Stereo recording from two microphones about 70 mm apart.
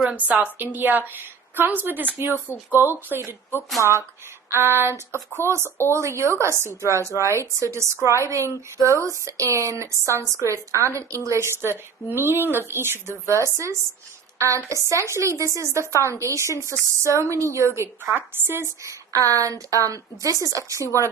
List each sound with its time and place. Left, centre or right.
0.0 s a woman's voice: centre; by 13.3 s right
14.3 s speech: right
18.0 s a woman's voice: right
18.9 s speech: right